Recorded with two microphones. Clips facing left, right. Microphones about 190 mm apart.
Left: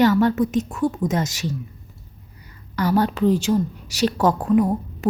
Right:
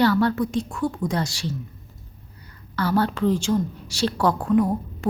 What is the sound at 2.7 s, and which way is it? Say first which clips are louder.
A woman's voice: left 2 dB; 15° left (ahead or behind).